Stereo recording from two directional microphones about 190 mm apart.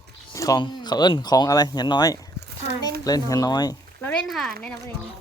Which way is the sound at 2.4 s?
65° right (ahead or behind).